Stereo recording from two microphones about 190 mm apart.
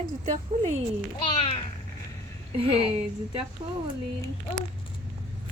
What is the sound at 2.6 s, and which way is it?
Speech, 30° right (ahead or behind).